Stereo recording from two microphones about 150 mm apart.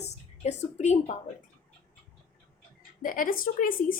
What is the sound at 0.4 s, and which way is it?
Speech, 50° left (ahead or behind).